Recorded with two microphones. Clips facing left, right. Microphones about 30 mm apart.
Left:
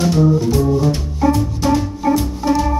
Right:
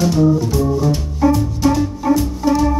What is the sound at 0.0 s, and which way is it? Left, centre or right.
Music, centre.